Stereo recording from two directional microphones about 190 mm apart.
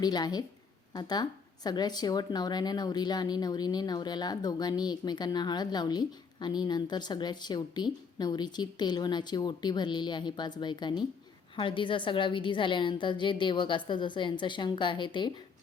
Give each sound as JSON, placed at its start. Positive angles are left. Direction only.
{"t": 0.0, "sound": "a woman's voice", "side_deg": 20}